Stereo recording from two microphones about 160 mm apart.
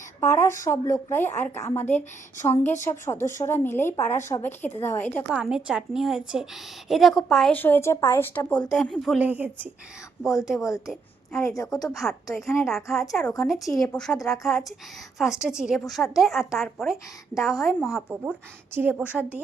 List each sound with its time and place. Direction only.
0.2 s speech: 15° left (ahead or behind)
5.3 s a woman's voice: 5° right (ahead or behind); by 8.6 s 10° left (ahead or behind)
8.7 s a woman's voice: centre (ahead or behind)
11.3 s a woman's voice: 20° left (ahead or behind)
11.9 s a woman's voice: centre (ahead or behind)
14.2 s a woman's voice: 20° left (ahead or behind)
15.2 s a woman's voice: centre (ahead or behind)
18.1 s speech: 10° right (ahead or behind)